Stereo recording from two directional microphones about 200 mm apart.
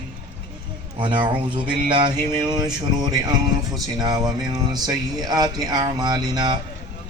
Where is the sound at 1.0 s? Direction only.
25° right (ahead or behind).